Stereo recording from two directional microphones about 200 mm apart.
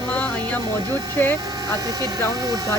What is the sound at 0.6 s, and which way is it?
Speech, 20° right (ahead or behind).